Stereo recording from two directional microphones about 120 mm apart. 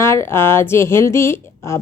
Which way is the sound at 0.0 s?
20° left (ahead or behind).